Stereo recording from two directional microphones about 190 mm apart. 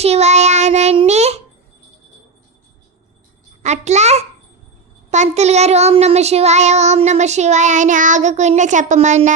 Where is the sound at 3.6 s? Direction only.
35° right (ahead or behind).